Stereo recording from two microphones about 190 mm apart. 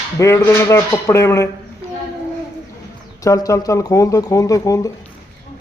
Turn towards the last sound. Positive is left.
turn(degrees=15)  # may be behind; listen again after turning